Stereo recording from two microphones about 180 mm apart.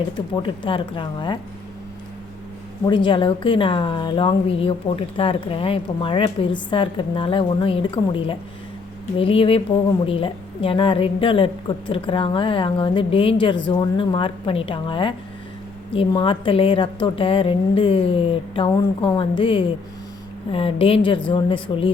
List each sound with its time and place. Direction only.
0.4 s a woman's voice: 25° left (ahead or behind)
2.8 s a woman's voice: 25° left (ahead or behind)